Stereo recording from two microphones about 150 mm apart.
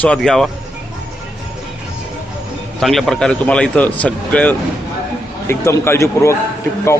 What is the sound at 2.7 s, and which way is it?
A man's voice, centre (ahead or behind).